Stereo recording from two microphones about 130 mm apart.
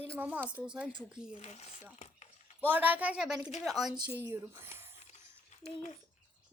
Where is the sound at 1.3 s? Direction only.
60° left (ahead or behind).